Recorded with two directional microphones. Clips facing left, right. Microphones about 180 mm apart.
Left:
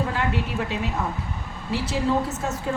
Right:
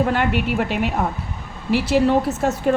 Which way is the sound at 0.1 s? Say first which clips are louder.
Right 6 dB; 70° right (ahead or behind).